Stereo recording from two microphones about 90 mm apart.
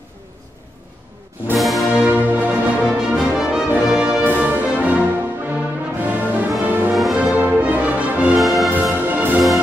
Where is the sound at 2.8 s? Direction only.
10° right (ahead or behind).